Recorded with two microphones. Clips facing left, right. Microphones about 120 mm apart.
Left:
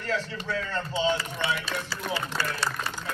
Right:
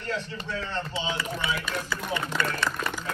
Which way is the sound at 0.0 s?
90° left.